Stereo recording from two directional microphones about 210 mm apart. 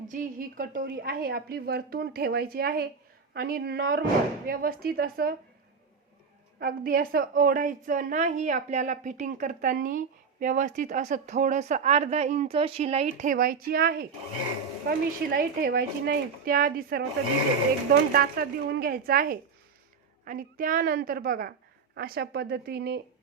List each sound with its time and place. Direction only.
0.1 s a woman's voice: 40° right (ahead or behind)
6.6 s a woman's voice: 45° right (ahead or behind); by 13.1 s 30° right (ahead or behind)
13.1 s a woman's voice: 40° right (ahead or behind)
18.1 s a woman's voice: 45° right (ahead or behind)